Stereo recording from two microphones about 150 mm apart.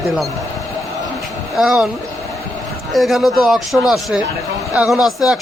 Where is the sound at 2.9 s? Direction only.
Centre (ahead or behind).